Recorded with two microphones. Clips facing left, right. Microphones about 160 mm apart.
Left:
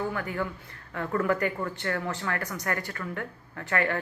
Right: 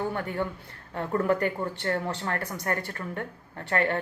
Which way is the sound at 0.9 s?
30° right (ahead or behind).